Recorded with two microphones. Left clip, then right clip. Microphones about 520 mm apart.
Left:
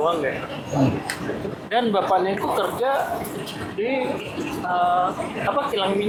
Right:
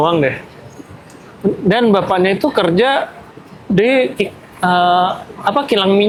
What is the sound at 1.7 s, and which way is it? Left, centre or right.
Speech, right.